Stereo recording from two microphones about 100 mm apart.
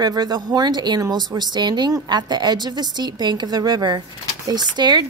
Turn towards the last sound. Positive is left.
turn(degrees=-45)  # may be behind; listen again after turning